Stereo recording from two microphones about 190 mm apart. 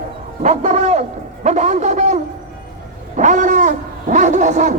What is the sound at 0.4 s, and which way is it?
Speech, 40° right (ahead or behind).